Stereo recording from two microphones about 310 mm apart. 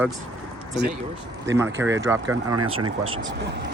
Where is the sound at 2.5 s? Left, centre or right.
Right.